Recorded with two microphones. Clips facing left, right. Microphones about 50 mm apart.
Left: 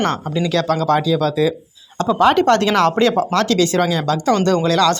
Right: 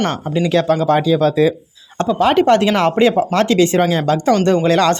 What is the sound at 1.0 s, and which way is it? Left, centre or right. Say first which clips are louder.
Speech: right 3 dB; right.